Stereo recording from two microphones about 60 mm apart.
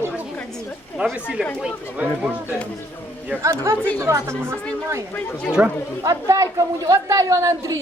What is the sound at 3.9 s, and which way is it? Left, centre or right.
Speech, right.